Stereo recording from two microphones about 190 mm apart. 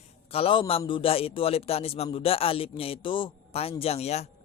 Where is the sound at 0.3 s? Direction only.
30° left (ahead or behind).